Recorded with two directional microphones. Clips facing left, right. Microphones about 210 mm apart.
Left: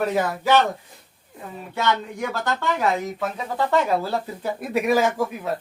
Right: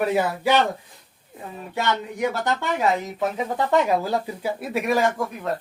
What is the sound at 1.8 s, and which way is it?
Speech, 20° right (ahead or behind).